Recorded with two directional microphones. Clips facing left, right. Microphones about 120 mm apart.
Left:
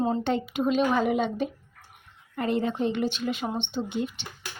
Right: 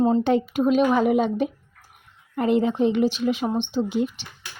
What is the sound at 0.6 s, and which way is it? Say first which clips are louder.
Speech: right 3 dB; 5° right (ahead or behind).